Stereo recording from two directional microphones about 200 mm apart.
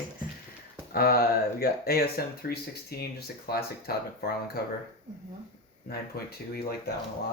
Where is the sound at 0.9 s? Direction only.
50° left (ahead or behind).